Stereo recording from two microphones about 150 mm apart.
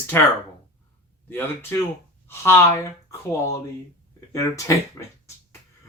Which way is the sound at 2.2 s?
15° left (ahead or behind).